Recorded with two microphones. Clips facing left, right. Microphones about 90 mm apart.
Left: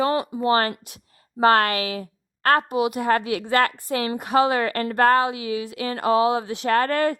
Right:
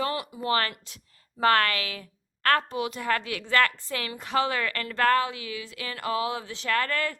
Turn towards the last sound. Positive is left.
turn(degrees=30)  # may be behind; listen again after turning